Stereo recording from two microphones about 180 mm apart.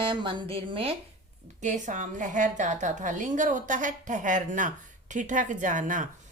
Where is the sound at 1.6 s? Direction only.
45° right (ahead or behind).